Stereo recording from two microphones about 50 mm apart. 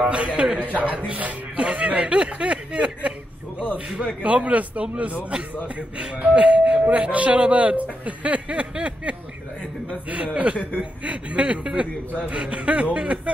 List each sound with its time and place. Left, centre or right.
0.1 s speech: right